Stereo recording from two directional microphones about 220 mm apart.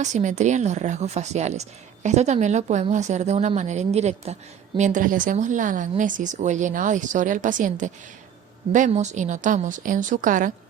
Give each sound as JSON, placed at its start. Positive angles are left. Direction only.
{"t": 0.0, "sound": "speech", "side_deg": -35}